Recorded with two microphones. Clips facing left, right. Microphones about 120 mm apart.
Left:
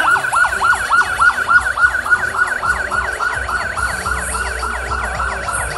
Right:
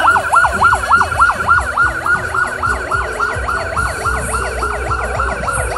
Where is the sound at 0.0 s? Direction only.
35° right (ahead or behind).